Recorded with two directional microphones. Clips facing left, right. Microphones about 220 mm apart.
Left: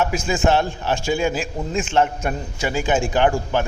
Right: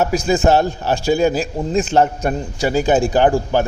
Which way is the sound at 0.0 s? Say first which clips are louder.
Right 4 dB; 35° right (ahead or behind).